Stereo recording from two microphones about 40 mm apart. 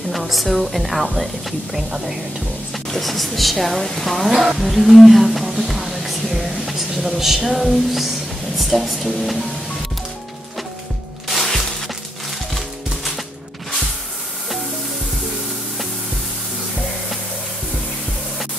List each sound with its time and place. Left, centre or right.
0.1 s a woman's voice: centre
1.8 s speech: right
2.9 s a woman's voice: centre
4.6 s a sound: centre
8.5 s a woman's voice: centre
11.2 s music: centre